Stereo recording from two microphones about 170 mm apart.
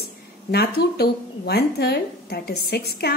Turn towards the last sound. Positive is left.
turn(degrees=70)  # may be behind; listen again after turning